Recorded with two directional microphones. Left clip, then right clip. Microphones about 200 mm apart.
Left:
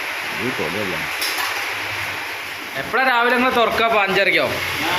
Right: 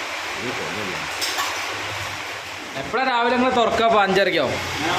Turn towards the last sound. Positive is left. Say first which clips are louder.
# left 2 dB
turn(degrees=-20)  # may be behind; listen again after turning